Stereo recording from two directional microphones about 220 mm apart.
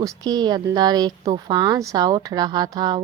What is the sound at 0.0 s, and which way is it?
A woman's voice, 20° right (ahead or behind).